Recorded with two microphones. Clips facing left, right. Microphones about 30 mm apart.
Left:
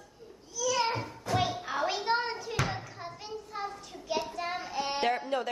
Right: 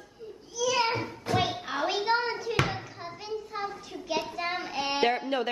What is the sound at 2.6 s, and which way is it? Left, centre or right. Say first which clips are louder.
Hands: right 2 dB; centre.